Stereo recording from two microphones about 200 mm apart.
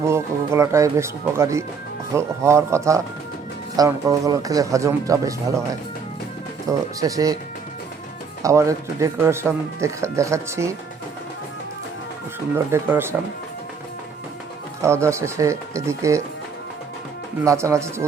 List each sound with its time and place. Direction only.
0.0 s speech: 15° right (ahead or behind)
6.7 s speech: 15° right (ahead or behind)
8.4 s speech: 15° right (ahead or behind)
12.5 s speech: 10° right (ahead or behind)
14.8 s speech: 15° right (ahead or behind)
17.4 s speech: 15° right (ahead or behind)